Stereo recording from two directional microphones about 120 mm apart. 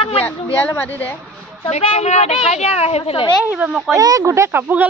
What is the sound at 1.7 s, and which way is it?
A woman's voice, 60° left (ahead or behind).